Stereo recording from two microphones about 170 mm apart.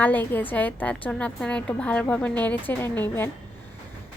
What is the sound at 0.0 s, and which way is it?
A woman's voice, 10° left (ahead or behind).